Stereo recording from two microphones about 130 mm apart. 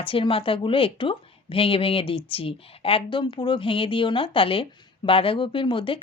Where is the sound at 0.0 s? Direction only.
45° left (ahead or behind).